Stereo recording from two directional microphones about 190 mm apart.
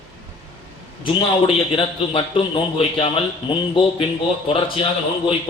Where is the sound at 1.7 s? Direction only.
30° left (ahead or behind).